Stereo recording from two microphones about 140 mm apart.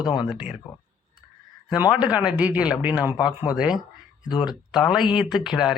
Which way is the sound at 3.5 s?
5° right (ahead or behind).